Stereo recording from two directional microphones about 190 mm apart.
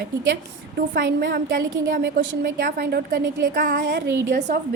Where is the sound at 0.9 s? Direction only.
65° right (ahead or behind).